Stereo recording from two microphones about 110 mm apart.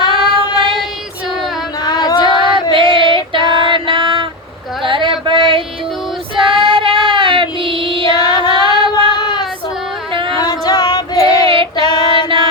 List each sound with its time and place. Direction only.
0.1 s child singing: 55° right (ahead or behind)
1.8 s female singing: 40° left (ahead or behind)
2.5 s female singing: 50° right (ahead or behind)
4.8 s mantra: 50° right (ahead or behind)
6.3 s child singing: 55° right (ahead or behind)
8.3 s female singing: 40° left (ahead or behind)
8.8 s female singing: 55° right (ahead or behind)
9.1 s child singing: 40° left (ahead or behind)
10.1 s a sound: 50° right (ahead or behind)
10.4 s female singing: 40° left (ahead or behind)
11.4 s female singing: 55° right (ahead or behind)
11.9 s child singing: 40° left (ahead or behind)